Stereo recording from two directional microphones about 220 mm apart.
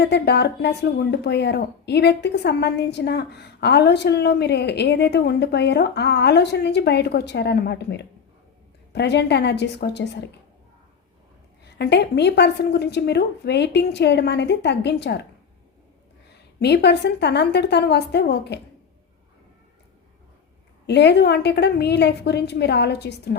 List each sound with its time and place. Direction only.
0.0 s speech: 50° left (ahead or behind)
11.8 s speech: 50° left (ahead or behind)
16.6 s speech: 50° left (ahead or behind)
20.8 s speech: 50° left (ahead or behind)